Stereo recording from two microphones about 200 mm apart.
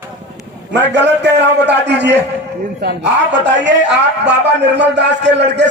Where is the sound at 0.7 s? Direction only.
60° right (ahead or behind).